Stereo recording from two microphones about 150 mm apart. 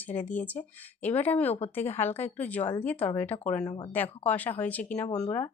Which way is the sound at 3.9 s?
10° left (ahead or behind).